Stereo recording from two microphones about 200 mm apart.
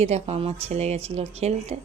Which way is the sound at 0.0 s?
30° right (ahead or behind).